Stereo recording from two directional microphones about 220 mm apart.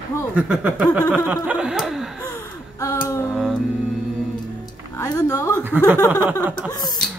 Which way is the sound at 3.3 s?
Centre (ahead or behind).